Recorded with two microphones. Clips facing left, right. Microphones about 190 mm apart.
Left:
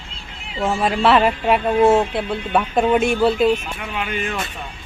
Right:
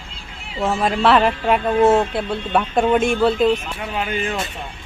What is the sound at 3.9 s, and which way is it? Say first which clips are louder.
Speech: right 2 dB; 30° right (ahead or behind).